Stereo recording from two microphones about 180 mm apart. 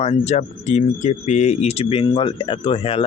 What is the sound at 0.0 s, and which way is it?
Speech, 35° left (ahead or behind).